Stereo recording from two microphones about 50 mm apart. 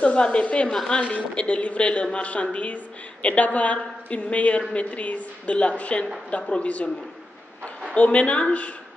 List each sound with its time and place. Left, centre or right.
0.2 s a man's voice: left
7.9 s a man's voice: left